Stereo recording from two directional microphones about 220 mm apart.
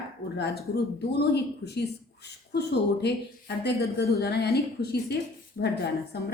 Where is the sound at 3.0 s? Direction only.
50° left (ahead or behind).